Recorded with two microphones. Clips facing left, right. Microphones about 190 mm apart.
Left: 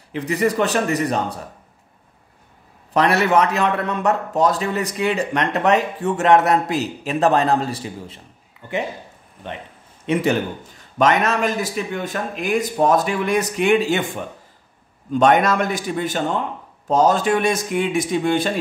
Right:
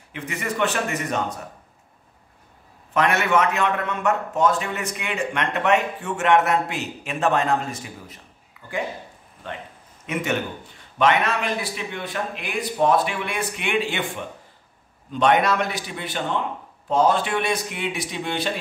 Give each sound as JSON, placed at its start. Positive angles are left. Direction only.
{"t": 0.1, "sound": "a man's voice", "side_deg": 35}
{"t": 2.9, "sound": "a man's voice", "side_deg": 35}
{"t": 10.1, "sound": "a man's voice", "side_deg": 30}
{"t": 11.0, "sound": "a man's voice", "side_deg": 40}